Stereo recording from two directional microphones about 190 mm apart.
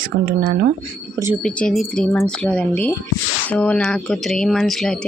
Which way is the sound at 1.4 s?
Centre (ahead or behind).